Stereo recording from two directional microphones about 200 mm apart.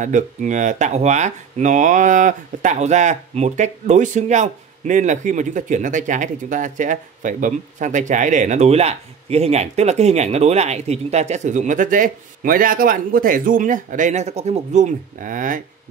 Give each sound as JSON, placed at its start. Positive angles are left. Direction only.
{"t": 0.0, "sound": "speech", "side_deg": -40}